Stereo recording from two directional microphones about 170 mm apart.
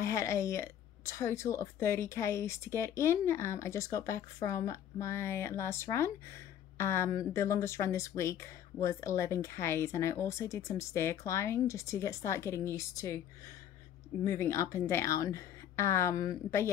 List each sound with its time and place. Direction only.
0.0 s a woman's voice: 15° left (ahead or behind)
14.2 s a woman's voice: 15° left (ahead or behind)